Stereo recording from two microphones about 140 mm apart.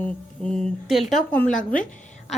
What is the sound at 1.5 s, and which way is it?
Speech, 75° left (ahead or behind).